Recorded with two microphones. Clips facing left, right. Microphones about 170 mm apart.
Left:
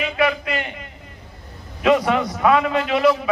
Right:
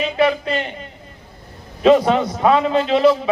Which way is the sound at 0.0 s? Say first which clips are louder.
Right 3 dB; 30° right (ahead or behind).